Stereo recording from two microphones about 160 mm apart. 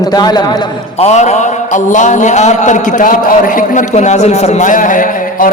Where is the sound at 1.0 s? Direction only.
45° left (ahead or behind).